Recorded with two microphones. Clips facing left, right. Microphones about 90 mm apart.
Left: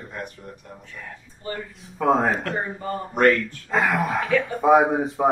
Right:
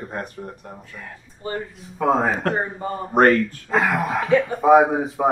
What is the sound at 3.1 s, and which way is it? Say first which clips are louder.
Speech: right 3 dB; 40° right (ahead or behind).